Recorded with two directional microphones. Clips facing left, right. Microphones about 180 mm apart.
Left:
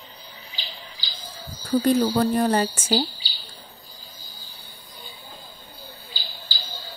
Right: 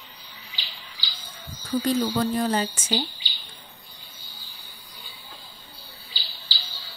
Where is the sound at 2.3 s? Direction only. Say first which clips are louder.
Left 3 dB; 55° left (ahead or behind).